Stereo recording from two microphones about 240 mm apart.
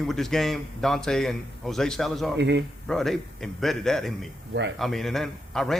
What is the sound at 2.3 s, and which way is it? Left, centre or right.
Speech, right.